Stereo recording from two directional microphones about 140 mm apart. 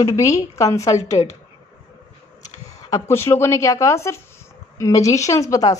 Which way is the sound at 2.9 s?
20° left (ahead or behind).